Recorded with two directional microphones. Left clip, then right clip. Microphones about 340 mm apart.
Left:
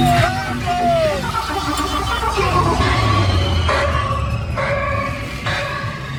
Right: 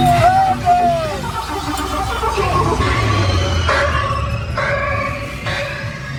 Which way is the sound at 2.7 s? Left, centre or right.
Centre.